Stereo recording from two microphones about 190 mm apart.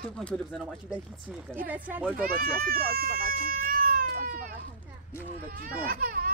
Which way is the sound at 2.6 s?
50° right (ahead or behind).